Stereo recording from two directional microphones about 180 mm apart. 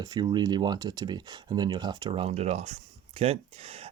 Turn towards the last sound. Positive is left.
turn(degrees=-35)  # may be behind; listen again after turning